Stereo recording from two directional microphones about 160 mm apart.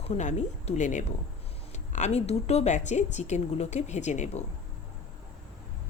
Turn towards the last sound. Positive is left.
turn(degrees=45)  # may be behind; listen again after turning